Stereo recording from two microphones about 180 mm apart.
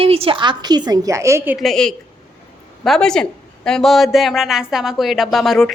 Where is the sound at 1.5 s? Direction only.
Centre (ahead or behind).